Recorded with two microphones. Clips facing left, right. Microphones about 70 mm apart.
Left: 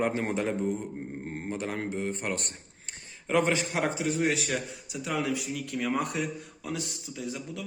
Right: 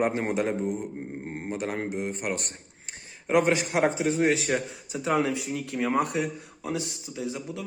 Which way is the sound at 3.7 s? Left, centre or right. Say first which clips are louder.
Right 4 dB; right.